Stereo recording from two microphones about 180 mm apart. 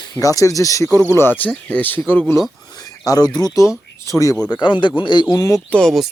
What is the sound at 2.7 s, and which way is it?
Speech, 20° left (ahead or behind).